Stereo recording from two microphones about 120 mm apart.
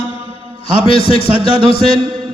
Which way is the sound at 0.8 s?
50° left (ahead or behind).